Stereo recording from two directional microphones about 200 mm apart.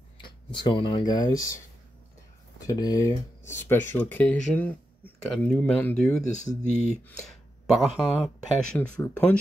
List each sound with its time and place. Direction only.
0.2 s speech: 25° left (ahead or behind)
2.6 s speech: 15° left (ahead or behind)
6.2 s speech: 35° left (ahead or behind)
7.2 s a sound: centre (ahead or behind)
8.5 s speech: 5° left (ahead or behind)